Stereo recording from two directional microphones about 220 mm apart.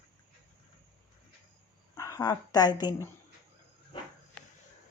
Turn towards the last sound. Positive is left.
turn(degrees=20)  # may be behind; listen again after turning